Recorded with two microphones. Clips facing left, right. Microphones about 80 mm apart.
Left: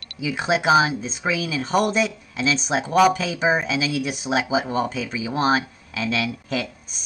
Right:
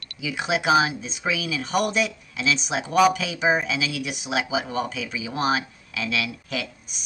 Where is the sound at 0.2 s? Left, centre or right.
Left.